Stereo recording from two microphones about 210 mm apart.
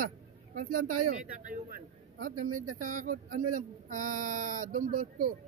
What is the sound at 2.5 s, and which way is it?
Speech, 90° right.